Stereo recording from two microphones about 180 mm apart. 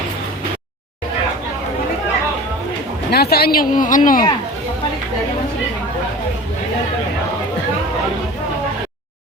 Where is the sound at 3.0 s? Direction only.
60° left (ahead or behind).